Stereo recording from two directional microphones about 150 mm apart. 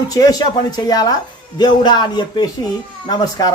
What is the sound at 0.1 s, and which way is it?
Speech, 25° left (ahead or behind).